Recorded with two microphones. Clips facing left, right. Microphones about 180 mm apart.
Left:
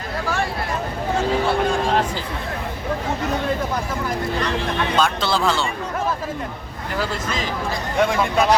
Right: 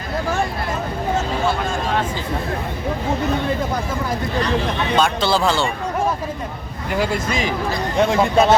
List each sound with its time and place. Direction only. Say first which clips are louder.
4.9 s speech: right 4 dB; centre (ahead or behind)
6.9 s speech: right 4 dB; 15° right (ahead or behind)
7.9 s speech: right 3 dB; 25° right (ahead or behind)